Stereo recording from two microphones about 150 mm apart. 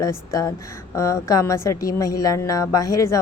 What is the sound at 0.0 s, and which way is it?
Speech, 20° left (ahead or behind).